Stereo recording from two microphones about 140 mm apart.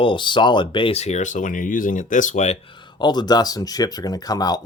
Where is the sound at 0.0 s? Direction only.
35° left (ahead or behind); by 2.6 s 60° left (ahead or behind).